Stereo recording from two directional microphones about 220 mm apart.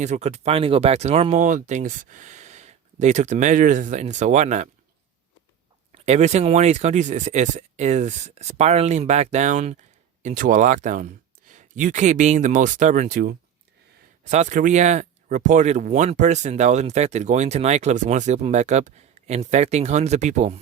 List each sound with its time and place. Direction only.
0.0 s speech: 30° right (ahead or behind)
5.9 s speech: 30° right (ahead or behind)